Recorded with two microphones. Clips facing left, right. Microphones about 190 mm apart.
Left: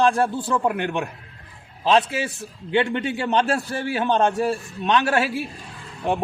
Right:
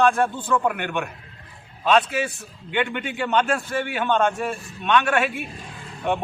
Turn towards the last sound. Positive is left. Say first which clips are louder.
# left 1 dB
turn(degrees=35)  # may be behind; listen again after turning